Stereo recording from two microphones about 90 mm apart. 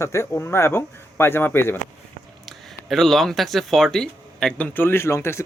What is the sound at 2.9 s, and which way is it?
Speech, 5° left (ahead or behind).